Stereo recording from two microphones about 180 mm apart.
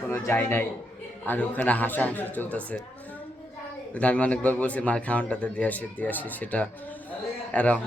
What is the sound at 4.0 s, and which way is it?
A man's voice, 5° left (ahead or behind).